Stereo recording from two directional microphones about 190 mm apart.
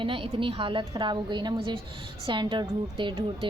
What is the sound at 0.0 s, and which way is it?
A woman's voice, 25° right (ahead or behind).